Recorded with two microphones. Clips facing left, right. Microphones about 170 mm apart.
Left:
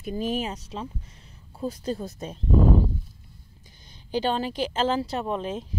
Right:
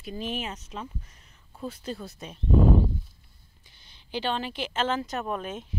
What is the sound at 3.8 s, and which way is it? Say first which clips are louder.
Speech: left 5 dB; 40° left (ahead or behind).